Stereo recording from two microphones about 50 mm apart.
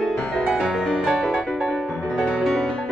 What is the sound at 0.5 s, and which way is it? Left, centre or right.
Music, centre.